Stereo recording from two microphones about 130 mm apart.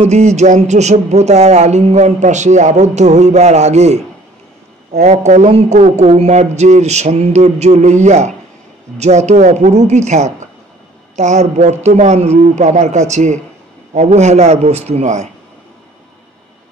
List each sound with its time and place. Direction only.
0.0 s music: 60° right (ahead or behind)
5.0 s music: 60° right (ahead or behind)